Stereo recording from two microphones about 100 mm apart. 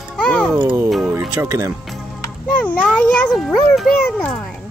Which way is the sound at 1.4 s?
30° right (ahead or behind).